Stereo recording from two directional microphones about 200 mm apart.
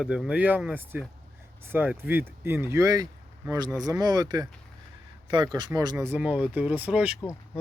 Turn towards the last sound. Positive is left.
turn(degrees=-5)  # may be behind; listen again after turning